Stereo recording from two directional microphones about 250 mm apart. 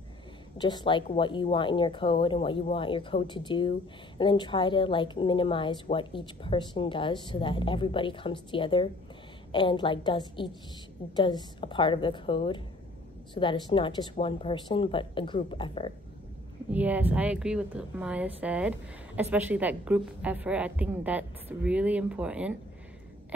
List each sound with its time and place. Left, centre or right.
0.6 s a woman's voice: centre
16.7 s a woman's voice: centre